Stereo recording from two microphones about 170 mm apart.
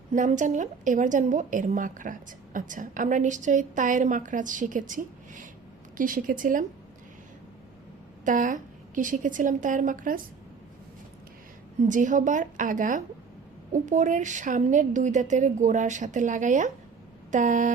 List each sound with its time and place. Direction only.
0.1 s a woman's voice: 45° right (ahead or behind)
8.2 s a woman's voice: 50° right (ahead or behind)
11.9 s a woman's voice: 50° right (ahead or behind)